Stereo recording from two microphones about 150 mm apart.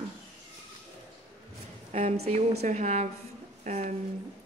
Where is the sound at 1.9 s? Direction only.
45° right (ahead or behind).